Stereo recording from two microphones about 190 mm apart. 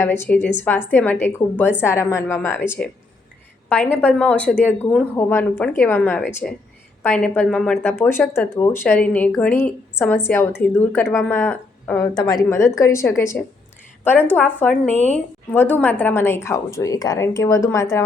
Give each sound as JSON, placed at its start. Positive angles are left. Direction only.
{"t": 0.0, "sound": "a woman's voice", "side_deg": 10}